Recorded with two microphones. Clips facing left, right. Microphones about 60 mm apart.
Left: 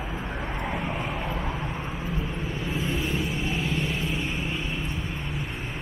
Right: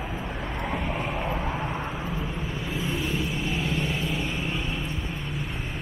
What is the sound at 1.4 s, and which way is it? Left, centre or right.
Vehicle, right.